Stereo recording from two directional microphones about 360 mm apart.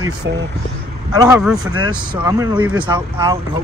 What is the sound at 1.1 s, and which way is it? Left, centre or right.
Speech, centre.